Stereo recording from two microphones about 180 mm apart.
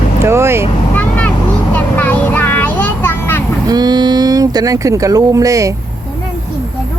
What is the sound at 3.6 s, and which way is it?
Speech, 20° right (ahead or behind).